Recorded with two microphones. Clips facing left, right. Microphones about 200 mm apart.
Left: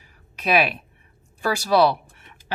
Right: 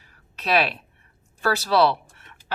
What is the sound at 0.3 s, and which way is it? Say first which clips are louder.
A woman's voice: left 2 dB; 10° left (ahead or behind).